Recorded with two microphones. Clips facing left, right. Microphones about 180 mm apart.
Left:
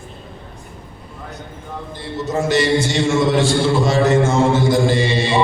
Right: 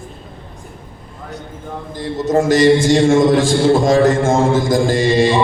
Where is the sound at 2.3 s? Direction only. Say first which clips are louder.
Right 6 dB; 45° right (ahead or behind).